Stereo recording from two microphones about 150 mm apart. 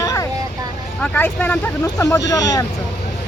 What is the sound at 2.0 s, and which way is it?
Speech, 20° left (ahead or behind).